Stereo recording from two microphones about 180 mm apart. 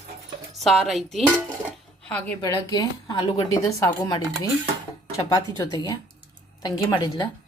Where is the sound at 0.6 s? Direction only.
Centre (ahead or behind).